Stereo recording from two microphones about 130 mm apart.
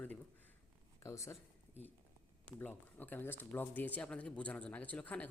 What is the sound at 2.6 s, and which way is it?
Speech, 10° left (ahead or behind).